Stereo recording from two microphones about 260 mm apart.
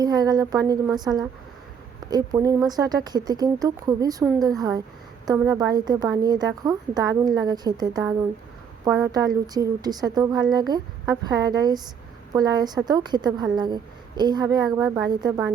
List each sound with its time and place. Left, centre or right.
0.0 s a woman's voice: centre